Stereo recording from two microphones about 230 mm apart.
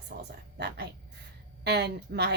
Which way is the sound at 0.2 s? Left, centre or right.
Right.